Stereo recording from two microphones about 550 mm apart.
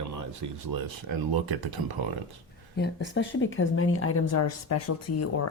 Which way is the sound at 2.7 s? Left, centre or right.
Centre.